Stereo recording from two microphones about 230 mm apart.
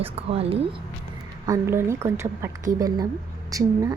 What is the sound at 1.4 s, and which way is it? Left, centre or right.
A woman's voice, centre.